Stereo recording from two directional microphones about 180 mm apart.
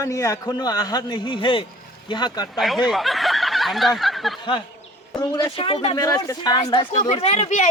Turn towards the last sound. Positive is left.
turn(degrees=40)  # may be behind; listen again after turning